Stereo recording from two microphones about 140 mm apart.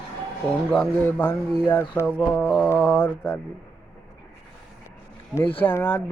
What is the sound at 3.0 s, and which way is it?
Speech, 10° left (ahead or behind).